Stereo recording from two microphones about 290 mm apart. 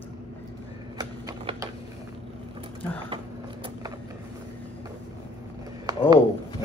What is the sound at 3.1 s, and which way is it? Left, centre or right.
Vehicle, centre.